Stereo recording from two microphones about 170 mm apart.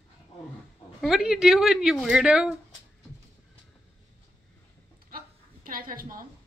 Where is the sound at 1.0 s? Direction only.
5° right (ahead or behind).